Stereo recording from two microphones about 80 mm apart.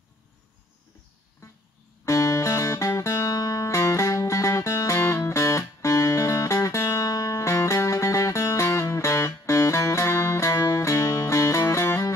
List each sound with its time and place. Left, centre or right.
2.0 s music: left